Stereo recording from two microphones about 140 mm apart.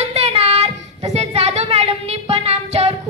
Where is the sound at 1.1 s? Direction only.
50° right (ahead or behind).